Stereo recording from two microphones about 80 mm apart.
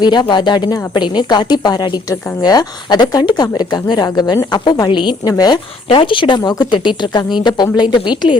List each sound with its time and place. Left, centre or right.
0.0 s speech: left
4.5 s speech: left
6.4 s speech: left